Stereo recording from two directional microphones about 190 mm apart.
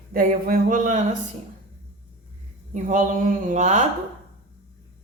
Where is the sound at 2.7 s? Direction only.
40° right (ahead or behind).